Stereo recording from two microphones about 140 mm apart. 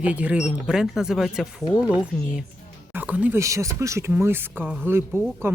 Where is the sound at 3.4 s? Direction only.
20° right (ahead or behind).